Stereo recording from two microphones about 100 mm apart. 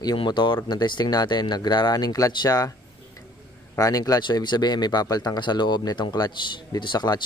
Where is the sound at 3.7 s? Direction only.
35° left (ahead or behind).